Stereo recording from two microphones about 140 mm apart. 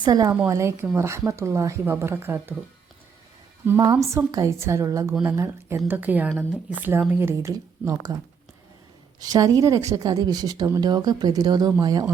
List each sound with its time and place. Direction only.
0.0 s speech: 25° right (ahead or behind)
3.9 s speech: 10° right (ahead or behind)
4.3 s speech: 25° right (ahead or behind)
9.2 s speech: 25° right (ahead or behind)